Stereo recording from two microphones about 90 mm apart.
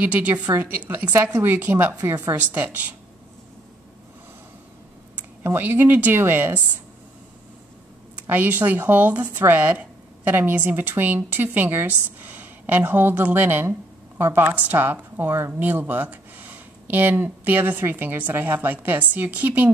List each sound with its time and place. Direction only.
0.0 s speech: 20° right (ahead or behind)
5.1 s speech: 25° right (ahead or behind)
8.3 s speech: 20° right (ahead or behind)